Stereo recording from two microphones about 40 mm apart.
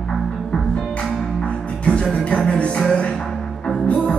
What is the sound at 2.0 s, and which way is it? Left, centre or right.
Music, centre.